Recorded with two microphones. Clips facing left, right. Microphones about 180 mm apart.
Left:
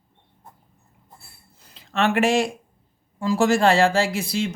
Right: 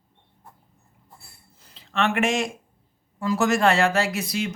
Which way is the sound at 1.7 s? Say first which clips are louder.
Left 3 dB; 45° left (ahead or behind).